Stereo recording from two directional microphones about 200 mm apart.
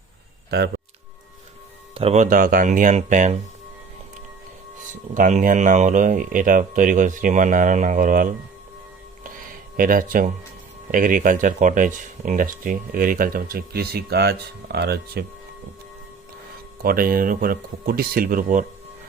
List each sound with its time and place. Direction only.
0.5 s speech: 55° right (ahead or behind)
2.0 s speech: 35° right (ahead or behind)
4.9 s speech: 40° right (ahead or behind)
9.7 s speech: 45° right (ahead or behind)
16.8 s speech: 45° right (ahead or behind)